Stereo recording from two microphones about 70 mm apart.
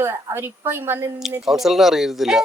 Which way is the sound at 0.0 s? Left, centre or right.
Right.